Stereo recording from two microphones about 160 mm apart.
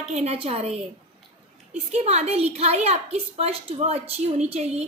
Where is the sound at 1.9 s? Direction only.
40° right (ahead or behind).